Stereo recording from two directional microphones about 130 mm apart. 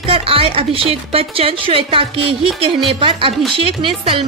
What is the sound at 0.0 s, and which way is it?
A woman's voice, 45° right (ahead or behind).